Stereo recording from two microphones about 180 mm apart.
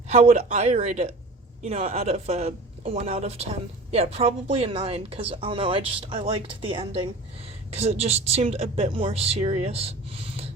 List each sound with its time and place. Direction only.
0.1 s speech: 35° right (ahead or behind)